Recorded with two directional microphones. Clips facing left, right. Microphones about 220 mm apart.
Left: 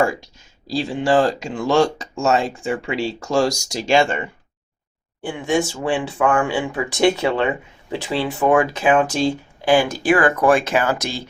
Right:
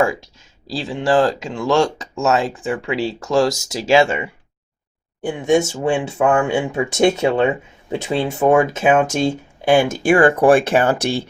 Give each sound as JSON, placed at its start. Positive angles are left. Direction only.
{"t": 0.0, "sound": "speech", "side_deg": 0}
{"t": 5.2, "sound": "speech", "side_deg": -20}